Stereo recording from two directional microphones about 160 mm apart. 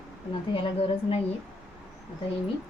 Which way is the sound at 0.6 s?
35° left (ahead or behind).